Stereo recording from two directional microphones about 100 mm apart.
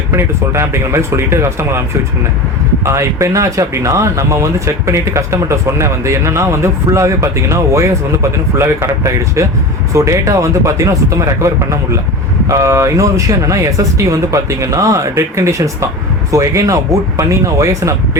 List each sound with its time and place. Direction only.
0.1 s speech: 25° right (ahead or behind)
2.8 s speech: 30° right (ahead or behind)